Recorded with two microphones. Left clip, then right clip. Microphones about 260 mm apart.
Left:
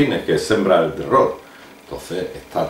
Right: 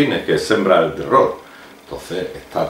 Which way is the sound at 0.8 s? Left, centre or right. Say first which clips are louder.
Right 2 dB; centre.